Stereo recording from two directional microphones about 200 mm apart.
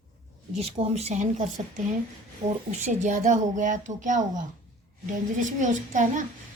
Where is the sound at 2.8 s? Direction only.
35° right (ahead or behind).